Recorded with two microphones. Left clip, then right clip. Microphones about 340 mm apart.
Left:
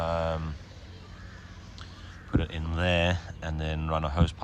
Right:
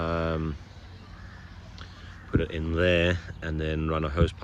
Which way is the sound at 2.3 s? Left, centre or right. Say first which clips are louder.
Right 4 dB; centre.